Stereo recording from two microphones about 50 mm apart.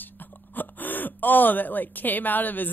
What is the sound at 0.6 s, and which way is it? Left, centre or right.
Speech, left.